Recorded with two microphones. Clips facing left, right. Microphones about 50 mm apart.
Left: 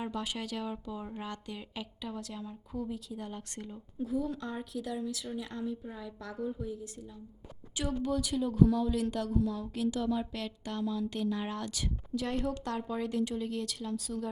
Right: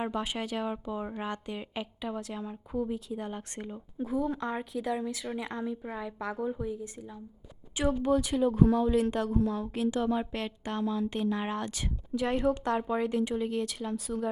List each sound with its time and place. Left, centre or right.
0.0 s a woman's voice: right
8.0 s speech: right